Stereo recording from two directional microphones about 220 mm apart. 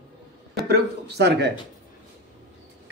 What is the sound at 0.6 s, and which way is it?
Speech, 45° right (ahead or behind).